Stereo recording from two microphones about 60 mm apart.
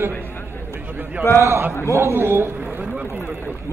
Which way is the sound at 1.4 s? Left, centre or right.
Right.